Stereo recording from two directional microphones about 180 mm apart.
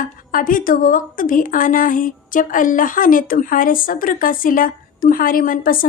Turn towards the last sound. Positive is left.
turn(degrees=50)  # may be behind; listen again after turning